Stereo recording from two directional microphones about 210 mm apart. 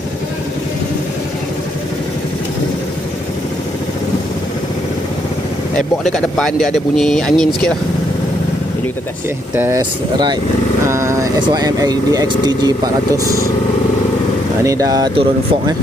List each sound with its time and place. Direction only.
6.1 s speech: centre (ahead or behind)
9.6 s speech: 15° right (ahead or behind)
14.6 s speech: 15° right (ahead or behind)